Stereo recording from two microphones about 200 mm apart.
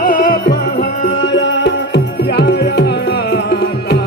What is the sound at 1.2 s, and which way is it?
Music, 65° left (ahead or behind).